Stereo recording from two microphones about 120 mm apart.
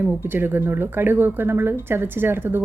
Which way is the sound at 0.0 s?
20° right (ahead or behind).